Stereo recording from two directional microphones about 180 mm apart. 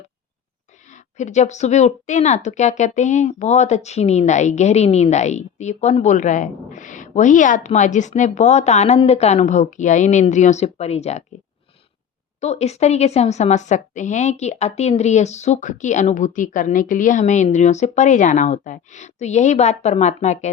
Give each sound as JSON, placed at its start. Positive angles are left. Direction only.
{"t": 0.9, "sound": "a woman's voice", "side_deg": 40}
{"t": 12.4, "sound": "a woman's voice", "side_deg": 40}